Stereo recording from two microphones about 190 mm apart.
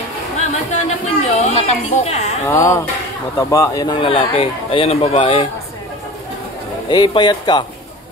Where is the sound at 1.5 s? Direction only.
35° left (ahead or behind).